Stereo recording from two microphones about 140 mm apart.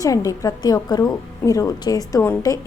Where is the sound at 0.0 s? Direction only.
25° left (ahead or behind).